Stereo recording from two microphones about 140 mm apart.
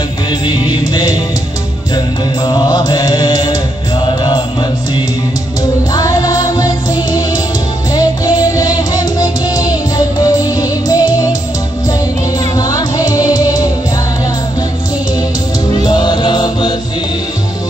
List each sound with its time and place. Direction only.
0.3 s music: 30° left (ahead or behind)
2.4 s mantra: 30° left (ahead or behind)
4.0 s music: 30° left (ahead or behind)
5.9 s music: 25° left (ahead or behind)
12.5 s music: 25° left (ahead or behind)
15.7 s music: 30° left (ahead or behind)